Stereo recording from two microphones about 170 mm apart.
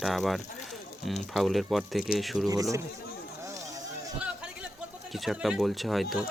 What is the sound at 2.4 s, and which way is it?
Speech, 20° right (ahead or behind).